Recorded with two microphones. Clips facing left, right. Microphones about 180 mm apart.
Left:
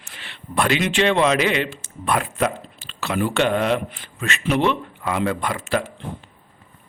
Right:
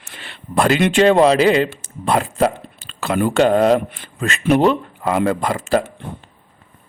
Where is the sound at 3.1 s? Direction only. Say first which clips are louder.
Right 5 dB; 50° right (ahead or behind).